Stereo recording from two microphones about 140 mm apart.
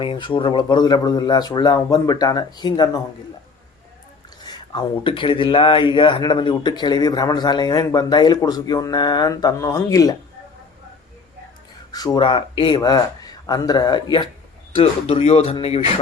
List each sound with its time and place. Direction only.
0.0 s speech: 35° left (ahead or behind)
4.4 s speech: 30° left (ahead or behind)
11.9 s speech: 30° left (ahead or behind); by 15.8 s 45° left (ahead or behind)